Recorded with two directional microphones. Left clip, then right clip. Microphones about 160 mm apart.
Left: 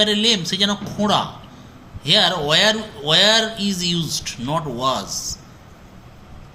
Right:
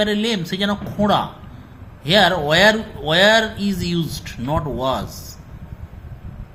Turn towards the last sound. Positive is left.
turn(degrees=-40)  # may be behind; listen again after turning